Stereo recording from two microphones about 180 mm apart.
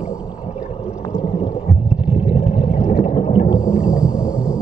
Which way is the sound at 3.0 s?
35° left (ahead or behind).